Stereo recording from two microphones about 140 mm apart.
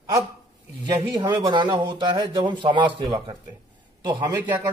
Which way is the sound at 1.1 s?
30° right (ahead or behind).